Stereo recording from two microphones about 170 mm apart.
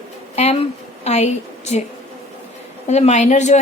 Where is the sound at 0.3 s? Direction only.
40° left (ahead or behind).